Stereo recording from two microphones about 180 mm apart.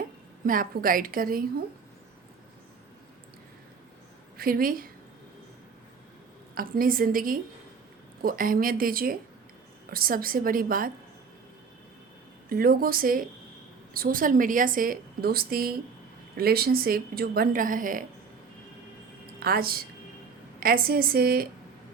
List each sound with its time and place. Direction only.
0.4 s a woman's voice: 50° right (ahead or behind)
4.4 s a woman's voice: 55° right (ahead or behind)
6.5 s a woman's voice: 50° right (ahead or behind)
12.5 s a woman's voice: 55° right (ahead or behind)
19.4 s a woman's voice: 55° right (ahead or behind)